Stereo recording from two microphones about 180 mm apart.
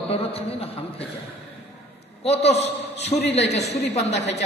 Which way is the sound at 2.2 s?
35° left (ahead or behind).